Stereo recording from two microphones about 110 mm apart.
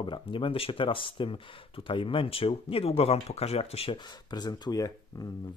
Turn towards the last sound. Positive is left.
turn(degrees=35)  # may be behind; listen again after turning